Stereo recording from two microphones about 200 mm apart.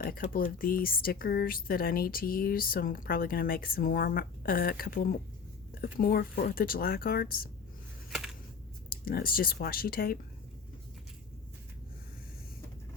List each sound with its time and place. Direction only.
0.0 s speech: 50° left (ahead or behind)
8.1 s a sound: centre (ahead or behind)
8.9 s speech: 45° left (ahead or behind)